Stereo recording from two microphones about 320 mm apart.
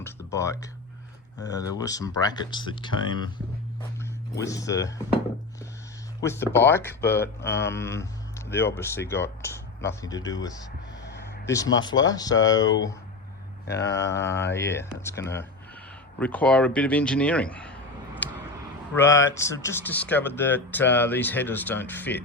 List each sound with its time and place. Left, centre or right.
0.0 s speech: centre
4.4 s speech: centre
6.2 s speech: centre
11.4 s speech: centre
13.7 s speech: left
14.5 s speech: centre